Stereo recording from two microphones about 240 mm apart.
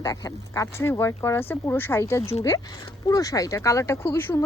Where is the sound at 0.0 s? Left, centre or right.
Centre.